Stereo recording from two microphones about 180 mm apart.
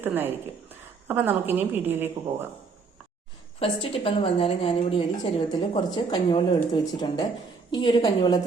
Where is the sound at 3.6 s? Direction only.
30° left (ahead or behind).